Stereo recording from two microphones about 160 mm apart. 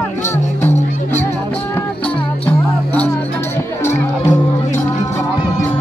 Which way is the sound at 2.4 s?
10° left (ahead or behind).